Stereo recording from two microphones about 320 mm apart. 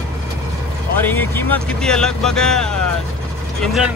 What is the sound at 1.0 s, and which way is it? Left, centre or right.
Speech, centre.